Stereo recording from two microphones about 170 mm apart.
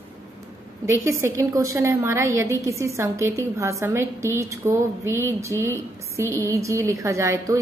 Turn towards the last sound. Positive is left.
turn(degrees=-20)  # may be behind; listen again after turning